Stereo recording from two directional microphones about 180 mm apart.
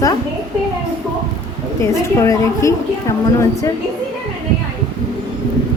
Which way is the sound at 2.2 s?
15° left (ahead or behind).